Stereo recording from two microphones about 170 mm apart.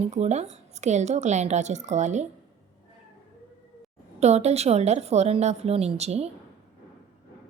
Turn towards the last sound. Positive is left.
turn(degrees=-40)  # may be behind; listen again after turning